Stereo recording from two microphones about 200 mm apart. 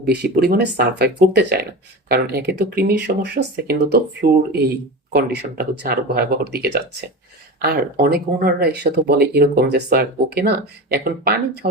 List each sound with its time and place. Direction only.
0.0 s speech: 55° right (ahead or behind)